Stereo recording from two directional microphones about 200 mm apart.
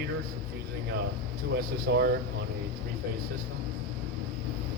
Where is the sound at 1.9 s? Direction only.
50° right (ahead or behind).